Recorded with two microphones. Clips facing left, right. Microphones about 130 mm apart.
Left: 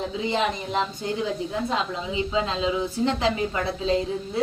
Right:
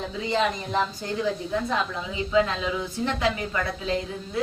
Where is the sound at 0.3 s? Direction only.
15° left (ahead or behind).